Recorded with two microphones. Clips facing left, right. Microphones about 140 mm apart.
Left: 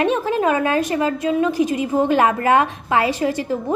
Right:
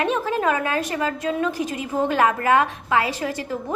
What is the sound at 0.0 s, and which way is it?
A woman's voice, 20° left (ahead or behind).